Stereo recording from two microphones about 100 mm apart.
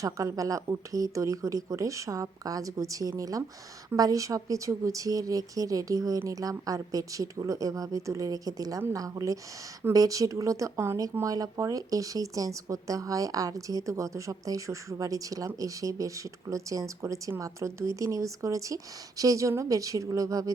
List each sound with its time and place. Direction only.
0.0 s speech: 35° right (ahead or behind)